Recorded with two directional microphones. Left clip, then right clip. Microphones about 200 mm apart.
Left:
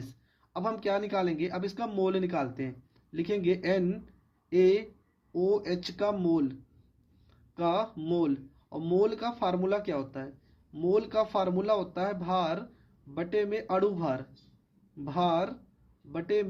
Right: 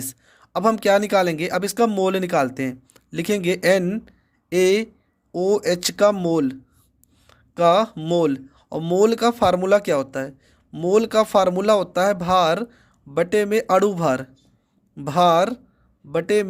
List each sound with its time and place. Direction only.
0.1 s speech: 65° right (ahead or behind)